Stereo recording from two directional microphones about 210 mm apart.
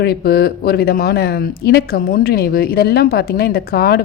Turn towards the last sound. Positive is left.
turn(degrees=45)  # may be behind; listen again after turning